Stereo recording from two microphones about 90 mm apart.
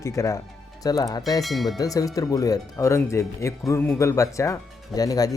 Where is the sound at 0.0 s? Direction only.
35° left (ahead or behind).